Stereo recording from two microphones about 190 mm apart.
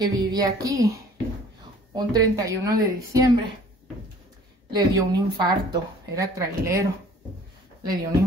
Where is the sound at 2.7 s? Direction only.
20° right (ahead or behind).